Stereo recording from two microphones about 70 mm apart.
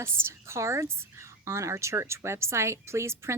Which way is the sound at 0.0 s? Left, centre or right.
Right.